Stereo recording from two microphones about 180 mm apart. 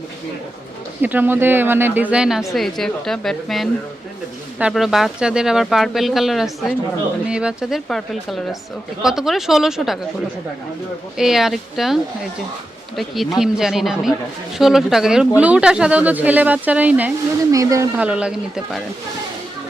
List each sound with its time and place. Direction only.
1.0 s a woman's voice: 10° right (ahead or behind)
11.2 s speech: centre (ahead or behind)
13.0 s a woman's voice: centre (ahead or behind); by 17.8 s 20° right (ahead or behind)
17.9 s speech: 5° right (ahead or behind)